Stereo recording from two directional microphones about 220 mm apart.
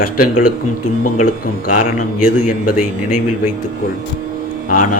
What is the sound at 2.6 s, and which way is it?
Speech, 90° left.